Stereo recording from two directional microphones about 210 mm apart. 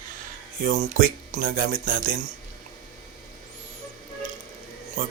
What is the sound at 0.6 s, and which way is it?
Speech, 35° right (ahead or behind).